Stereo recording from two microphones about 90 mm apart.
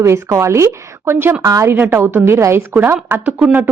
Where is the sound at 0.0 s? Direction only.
30° right (ahead or behind).